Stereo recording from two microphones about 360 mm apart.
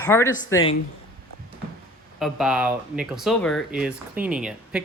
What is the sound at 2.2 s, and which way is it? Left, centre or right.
Speech, centre.